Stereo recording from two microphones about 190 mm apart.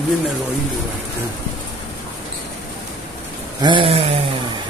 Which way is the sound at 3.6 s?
25° right (ahead or behind).